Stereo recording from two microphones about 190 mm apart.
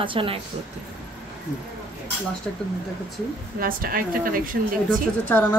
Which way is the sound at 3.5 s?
50° right (ahead or behind).